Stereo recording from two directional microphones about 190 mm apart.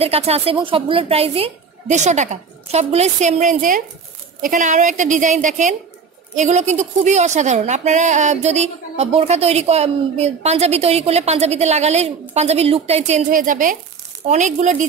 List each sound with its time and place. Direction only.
0.0 s a woman's voice: 30° right (ahead or behind)